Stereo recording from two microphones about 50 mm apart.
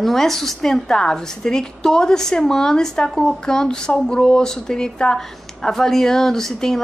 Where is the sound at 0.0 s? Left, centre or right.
Centre.